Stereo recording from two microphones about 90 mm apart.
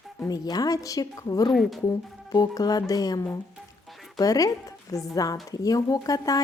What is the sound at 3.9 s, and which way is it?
Music, centre (ahead or behind).